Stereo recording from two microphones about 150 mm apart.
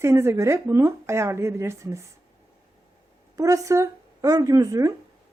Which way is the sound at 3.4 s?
20° right (ahead or behind).